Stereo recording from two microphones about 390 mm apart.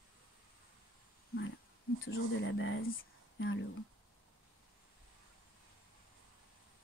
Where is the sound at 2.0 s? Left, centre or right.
Left.